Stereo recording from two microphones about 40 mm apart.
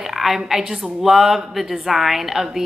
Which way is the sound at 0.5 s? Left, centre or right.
Centre.